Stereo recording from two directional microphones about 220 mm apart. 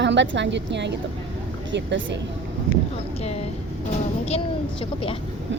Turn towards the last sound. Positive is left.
turn(degrees=25)  # may be behind; listen again after turning